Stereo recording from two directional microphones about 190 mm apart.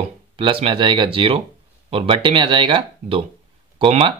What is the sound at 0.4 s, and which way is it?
Speech, 30° right (ahead or behind).